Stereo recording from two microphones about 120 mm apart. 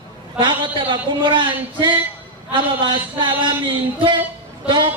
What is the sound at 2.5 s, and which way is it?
Speech, 40° right (ahead or behind).